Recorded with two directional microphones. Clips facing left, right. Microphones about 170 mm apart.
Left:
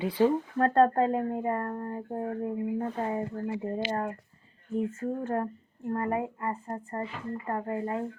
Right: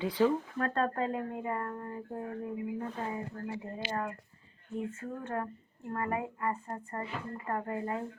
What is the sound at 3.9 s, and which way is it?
Speech, 35° left (ahead or behind).